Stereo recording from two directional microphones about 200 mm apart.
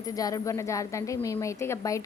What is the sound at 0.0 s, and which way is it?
Speech, 20° left (ahead or behind).